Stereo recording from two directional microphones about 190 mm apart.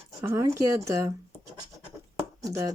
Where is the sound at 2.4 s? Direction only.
15° right (ahead or behind).